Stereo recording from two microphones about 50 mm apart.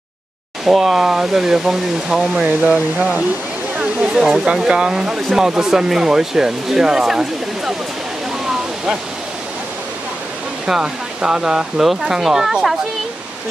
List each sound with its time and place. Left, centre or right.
0.7 s speech: centre
3.7 s a sound: centre
4.5 s speech: centre
10.7 s speech: centre